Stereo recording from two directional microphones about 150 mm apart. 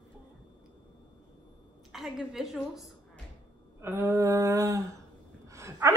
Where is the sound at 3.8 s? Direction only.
15° right (ahead or behind).